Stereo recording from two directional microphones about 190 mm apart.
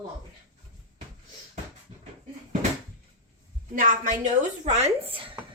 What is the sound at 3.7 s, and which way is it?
Speech, 45° right (ahead or behind).